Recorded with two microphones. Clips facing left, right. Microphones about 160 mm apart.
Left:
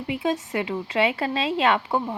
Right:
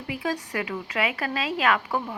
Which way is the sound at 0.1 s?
25° left (ahead or behind).